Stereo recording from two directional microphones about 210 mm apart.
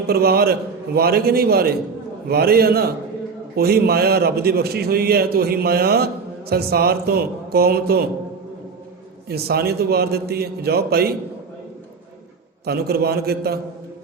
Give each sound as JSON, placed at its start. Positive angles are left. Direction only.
{"t": 0.1, "sound": "a man's voice", "side_deg": -45}
{"t": 9.3, "sound": "a man's voice", "side_deg": -50}
{"t": 12.6, "sound": "a man's voice", "side_deg": -50}